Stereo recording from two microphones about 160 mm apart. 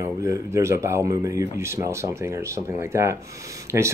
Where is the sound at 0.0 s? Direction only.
15° right (ahead or behind).